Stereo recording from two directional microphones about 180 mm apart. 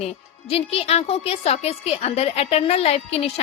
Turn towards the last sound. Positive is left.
turn(degrees=35)  # may be behind; listen again after turning